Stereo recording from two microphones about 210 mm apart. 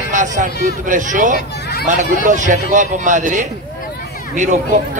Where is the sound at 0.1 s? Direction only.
35° right (ahead or behind).